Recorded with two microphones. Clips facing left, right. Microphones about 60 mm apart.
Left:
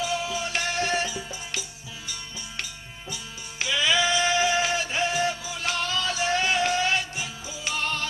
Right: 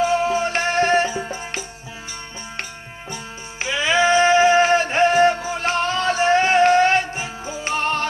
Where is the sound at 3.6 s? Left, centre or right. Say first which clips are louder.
Right 6 dB; right.